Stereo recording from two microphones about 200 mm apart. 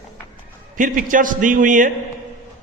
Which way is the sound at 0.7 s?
40° right (ahead or behind).